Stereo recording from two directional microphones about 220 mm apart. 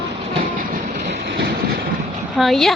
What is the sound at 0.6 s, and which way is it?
Train, 40° right (ahead or behind).